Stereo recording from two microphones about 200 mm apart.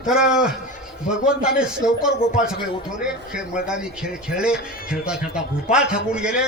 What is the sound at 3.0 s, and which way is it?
A man's voice, 5° right (ahead or behind).